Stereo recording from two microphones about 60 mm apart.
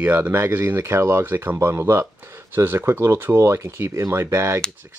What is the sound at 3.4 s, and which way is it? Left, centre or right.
Speech, right.